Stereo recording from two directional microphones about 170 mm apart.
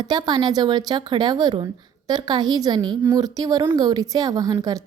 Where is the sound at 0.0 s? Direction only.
25° right (ahead or behind).